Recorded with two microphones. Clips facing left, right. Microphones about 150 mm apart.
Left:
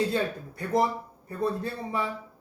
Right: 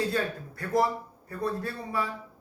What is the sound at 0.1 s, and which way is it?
A man's voice, 20° left (ahead or behind).